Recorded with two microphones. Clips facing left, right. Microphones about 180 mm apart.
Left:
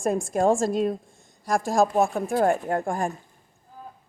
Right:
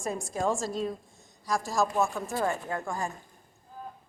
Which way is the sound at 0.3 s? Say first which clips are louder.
Left 8 dB; 50° left (ahead or behind).